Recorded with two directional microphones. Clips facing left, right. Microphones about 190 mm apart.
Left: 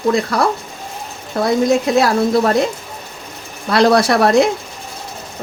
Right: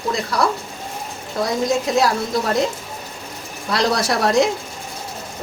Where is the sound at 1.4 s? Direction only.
60° left (ahead or behind).